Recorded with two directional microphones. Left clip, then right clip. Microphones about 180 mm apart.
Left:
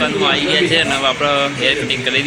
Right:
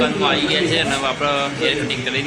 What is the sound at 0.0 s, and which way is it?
Speech, 10° left (ahead or behind).